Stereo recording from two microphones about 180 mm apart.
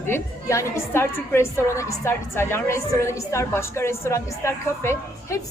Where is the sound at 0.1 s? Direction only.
15° left (ahead or behind).